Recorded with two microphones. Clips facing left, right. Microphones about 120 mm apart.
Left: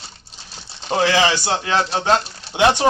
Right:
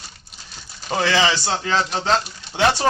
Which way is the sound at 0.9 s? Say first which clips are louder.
Left 2 dB; 15° left (ahead or behind).